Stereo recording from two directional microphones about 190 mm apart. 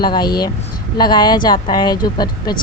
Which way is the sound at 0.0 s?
20° left (ahead or behind).